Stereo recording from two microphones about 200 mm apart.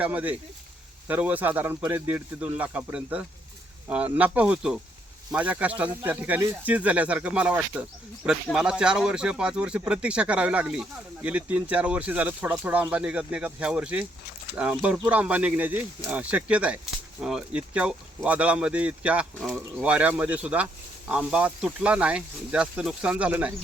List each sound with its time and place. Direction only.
0.0 s speech: 10° right (ahead or behind)